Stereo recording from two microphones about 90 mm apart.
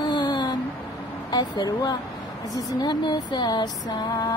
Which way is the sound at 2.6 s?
55° left (ahead or behind).